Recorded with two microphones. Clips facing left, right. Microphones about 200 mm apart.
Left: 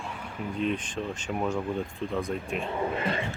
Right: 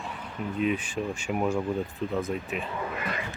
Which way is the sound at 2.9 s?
30° left (ahead or behind).